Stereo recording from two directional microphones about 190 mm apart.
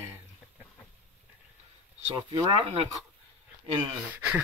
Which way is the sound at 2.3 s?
25° right (ahead or behind).